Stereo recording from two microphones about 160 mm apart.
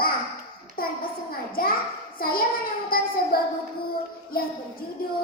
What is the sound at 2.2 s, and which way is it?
Child singing, 65° left (ahead or behind).